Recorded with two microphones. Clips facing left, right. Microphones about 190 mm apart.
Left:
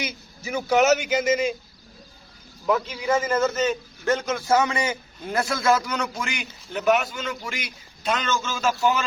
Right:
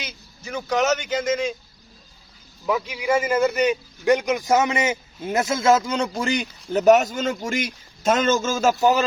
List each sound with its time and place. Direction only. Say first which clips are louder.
0.0 s speech: left 5 dB; 10° left (ahead or behind)
2.6 s a man's voice: even; 10° right (ahead or behind); by 9.0 s 40° right (ahead or behind)